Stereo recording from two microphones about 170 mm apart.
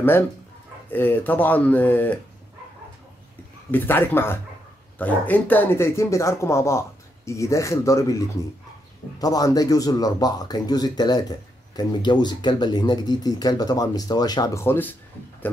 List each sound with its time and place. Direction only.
0.8 s speech: 10° left (ahead or behind)
3.7 s speech: 10° left (ahead or behind)
9.2 s speech: 20° left (ahead or behind)